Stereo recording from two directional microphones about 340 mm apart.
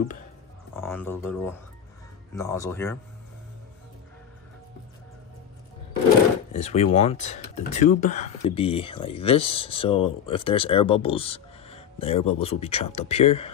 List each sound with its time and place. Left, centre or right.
0.7 s speech: centre
6.5 s speech: centre